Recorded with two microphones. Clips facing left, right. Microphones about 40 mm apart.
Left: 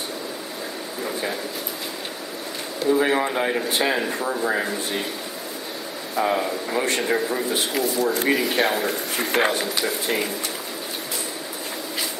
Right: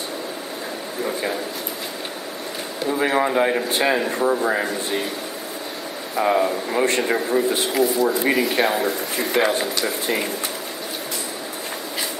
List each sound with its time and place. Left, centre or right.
3.0 s a man's voice: centre
6.1 s a man's voice: centre
9.2 s speech: left